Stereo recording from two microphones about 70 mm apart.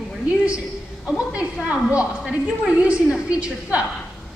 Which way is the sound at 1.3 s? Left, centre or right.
Centre.